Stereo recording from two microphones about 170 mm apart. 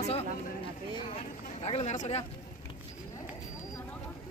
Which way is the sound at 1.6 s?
40° left (ahead or behind).